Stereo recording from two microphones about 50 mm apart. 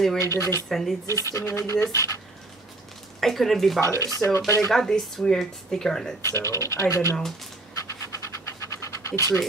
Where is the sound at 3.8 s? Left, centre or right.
Left.